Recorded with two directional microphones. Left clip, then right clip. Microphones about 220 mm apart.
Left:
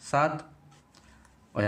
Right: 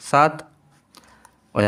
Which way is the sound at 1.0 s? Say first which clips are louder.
Right 8 dB; 40° right (ahead or behind).